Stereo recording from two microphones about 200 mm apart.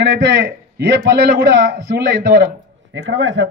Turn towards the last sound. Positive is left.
turn(degrees=-75)  # may be behind; listen again after turning